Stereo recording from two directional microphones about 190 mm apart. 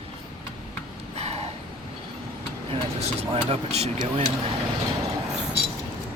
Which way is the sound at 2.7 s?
30° right (ahead or behind).